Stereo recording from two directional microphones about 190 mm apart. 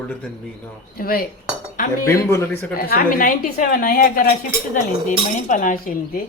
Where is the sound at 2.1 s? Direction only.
15° left (ahead or behind).